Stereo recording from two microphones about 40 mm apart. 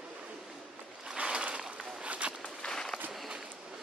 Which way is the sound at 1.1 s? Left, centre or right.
Right.